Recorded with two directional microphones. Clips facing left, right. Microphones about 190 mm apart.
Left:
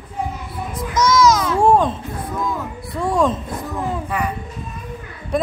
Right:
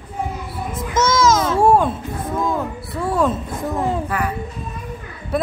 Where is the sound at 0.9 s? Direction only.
25° right (ahead or behind).